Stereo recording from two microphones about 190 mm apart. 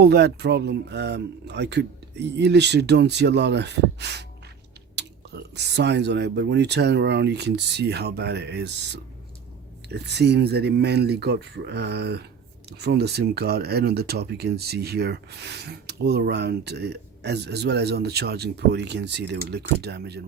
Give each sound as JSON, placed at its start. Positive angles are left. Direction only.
{"t": 0.0, "sound": "speech", "side_deg": -55}